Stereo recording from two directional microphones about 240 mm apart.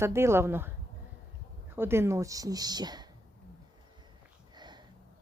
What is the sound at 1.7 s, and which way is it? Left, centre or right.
Speech, centre.